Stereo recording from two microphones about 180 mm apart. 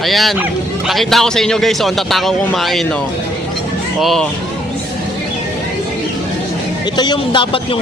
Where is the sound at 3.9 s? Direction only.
Centre (ahead or behind).